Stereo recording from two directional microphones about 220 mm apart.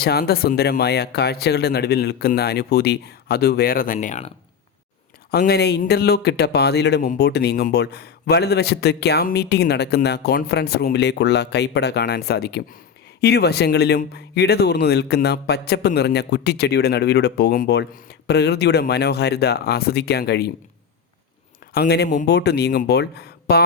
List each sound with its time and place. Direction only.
0.0 s speech: 45° left (ahead or behind)
5.3 s speech: 45° left (ahead or behind)
21.7 s a man's voice: 45° left (ahead or behind)